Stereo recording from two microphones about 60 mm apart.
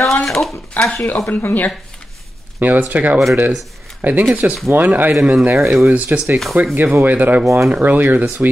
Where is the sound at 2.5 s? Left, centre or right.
Right.